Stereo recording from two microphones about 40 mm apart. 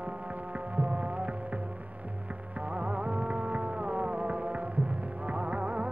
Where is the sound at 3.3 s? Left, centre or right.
Right.